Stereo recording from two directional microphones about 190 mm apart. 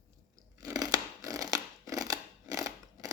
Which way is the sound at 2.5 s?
15° right (ahead or behind).